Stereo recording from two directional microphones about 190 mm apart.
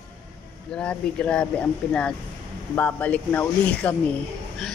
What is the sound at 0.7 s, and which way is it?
Speech, 5° left (ahead or behind).